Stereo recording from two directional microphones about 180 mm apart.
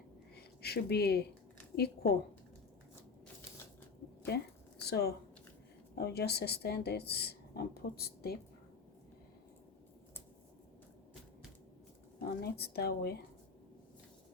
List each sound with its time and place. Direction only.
0.3 s a woman's voice: 60° left (ahead or behind)
4.8 s speech: 65° left (ahead or behind)
12.4 s speech: 60° left (ahead or behind)